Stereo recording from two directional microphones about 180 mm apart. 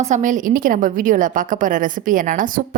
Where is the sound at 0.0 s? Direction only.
45° right (ahead or behind).